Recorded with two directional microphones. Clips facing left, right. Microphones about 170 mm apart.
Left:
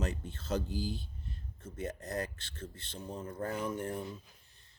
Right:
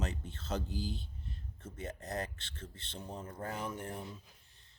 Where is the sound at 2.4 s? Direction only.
40° left (ahead or behind).